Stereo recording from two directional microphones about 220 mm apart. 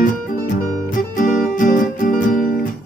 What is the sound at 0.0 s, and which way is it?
Music, 35° left (ahead or behind).